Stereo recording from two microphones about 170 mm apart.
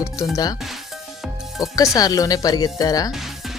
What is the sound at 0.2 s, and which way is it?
Speech, 20° left (ahead or behind).